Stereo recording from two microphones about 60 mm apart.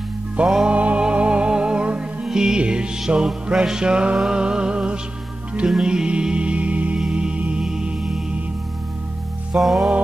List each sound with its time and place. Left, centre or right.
0.5 s music: centre
0.7 s music: right
7.6 s music: centre
9.6 s music: centre